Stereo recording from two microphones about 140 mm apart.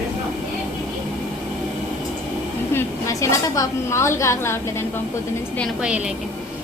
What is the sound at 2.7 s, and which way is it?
A woman's voice, 20° left (ahead or behind).